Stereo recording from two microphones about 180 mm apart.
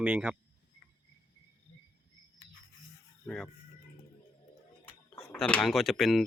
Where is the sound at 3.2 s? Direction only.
5° left (ahead or behind).